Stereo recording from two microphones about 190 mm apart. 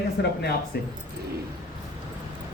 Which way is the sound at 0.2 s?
65° left (ahead or behind).